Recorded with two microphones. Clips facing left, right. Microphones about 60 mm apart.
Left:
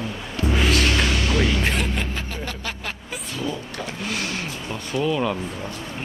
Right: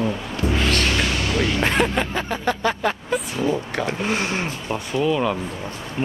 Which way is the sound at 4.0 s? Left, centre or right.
Right.